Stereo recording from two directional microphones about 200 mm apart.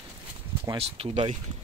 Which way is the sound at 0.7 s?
30° right (ahead or behind).